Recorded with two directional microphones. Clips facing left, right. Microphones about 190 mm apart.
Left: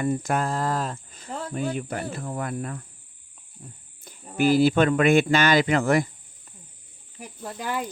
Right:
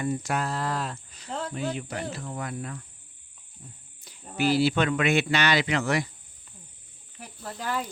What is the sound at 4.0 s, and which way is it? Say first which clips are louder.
Speech: left 4 dB; 50° left (ahead or behind).